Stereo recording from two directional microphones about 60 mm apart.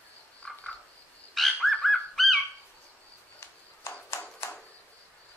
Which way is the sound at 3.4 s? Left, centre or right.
Left.